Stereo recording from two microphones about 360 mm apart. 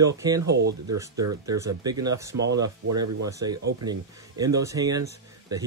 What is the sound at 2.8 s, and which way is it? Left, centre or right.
Speech, right.